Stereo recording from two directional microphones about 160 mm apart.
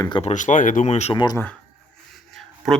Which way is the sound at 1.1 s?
25° left (ahead or behind).